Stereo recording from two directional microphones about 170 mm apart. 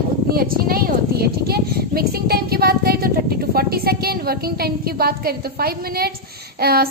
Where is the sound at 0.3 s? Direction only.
60° right (ahead or behind).